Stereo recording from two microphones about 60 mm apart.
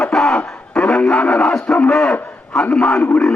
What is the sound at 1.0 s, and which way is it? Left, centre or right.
A man's voice, centre.